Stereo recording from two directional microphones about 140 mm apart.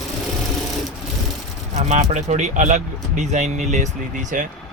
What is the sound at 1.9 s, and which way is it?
Speech, 55° right (ahead or behind).